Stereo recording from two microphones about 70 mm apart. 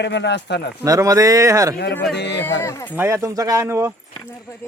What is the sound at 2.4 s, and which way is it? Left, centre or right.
Speech, left.